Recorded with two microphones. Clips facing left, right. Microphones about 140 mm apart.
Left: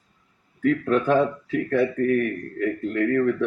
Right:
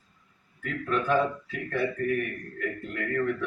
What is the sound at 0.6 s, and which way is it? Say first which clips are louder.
Speech: left 9 dB; 40° left (ahead or behind).